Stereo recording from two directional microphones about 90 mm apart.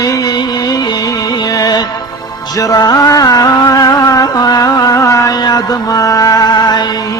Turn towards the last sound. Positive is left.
turn(degrees=50)  # may be behind; listen again after turning